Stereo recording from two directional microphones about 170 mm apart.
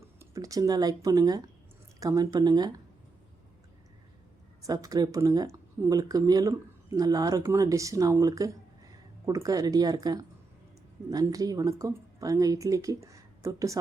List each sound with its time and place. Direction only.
0.2 s a woman's voice: 20° right (ahead or behind)
4.6 s a woman's voice: 20° right (ahead or behind)